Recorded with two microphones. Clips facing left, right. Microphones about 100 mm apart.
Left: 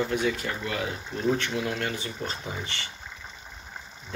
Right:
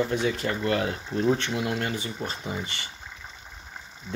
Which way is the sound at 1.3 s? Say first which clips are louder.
Even; 20° right (ahead or behind).